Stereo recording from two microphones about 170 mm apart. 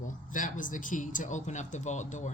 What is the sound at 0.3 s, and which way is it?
Speech, 50° left (ahead or behind).